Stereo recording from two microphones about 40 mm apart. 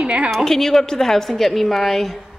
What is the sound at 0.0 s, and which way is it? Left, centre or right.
Speech, right.